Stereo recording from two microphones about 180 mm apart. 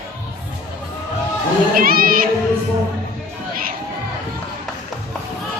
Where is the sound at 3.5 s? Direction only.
50° right (ahead or behind).